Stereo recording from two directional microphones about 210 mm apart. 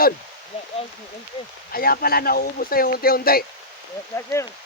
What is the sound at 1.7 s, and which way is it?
Speech, 45° left (ahead or behind).